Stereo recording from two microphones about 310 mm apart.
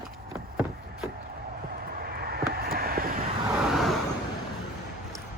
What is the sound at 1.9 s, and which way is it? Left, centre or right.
Vehicle, right.